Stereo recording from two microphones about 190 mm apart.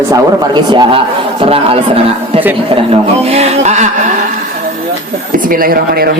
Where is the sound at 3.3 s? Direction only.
35° right (ahead or behind).